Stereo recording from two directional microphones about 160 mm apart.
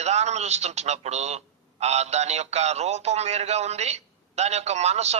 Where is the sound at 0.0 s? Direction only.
45° right (ahead or behind).